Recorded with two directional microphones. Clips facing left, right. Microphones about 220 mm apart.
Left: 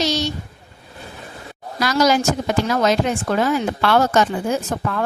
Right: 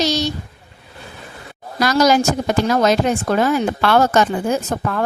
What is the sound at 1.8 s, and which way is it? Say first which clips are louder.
A woman's voice: right 3 dB; 45° right (ahead or behind).